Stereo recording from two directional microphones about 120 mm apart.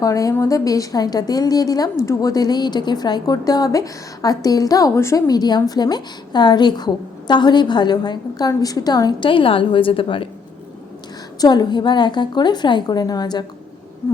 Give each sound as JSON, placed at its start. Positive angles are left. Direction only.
{"t": 0.0, "sound": "a woman's voice", "side_deg": 30}
{"t": 11.3, "sound": "a woman's voice", "side_deg": 35}